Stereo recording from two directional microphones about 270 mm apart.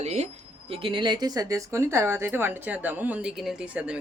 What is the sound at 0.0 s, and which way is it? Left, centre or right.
Speech, right.